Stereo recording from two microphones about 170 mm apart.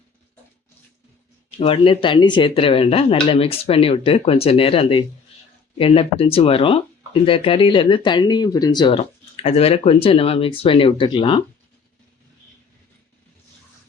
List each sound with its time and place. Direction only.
1.5 s speech: 35° left (ahead or behind)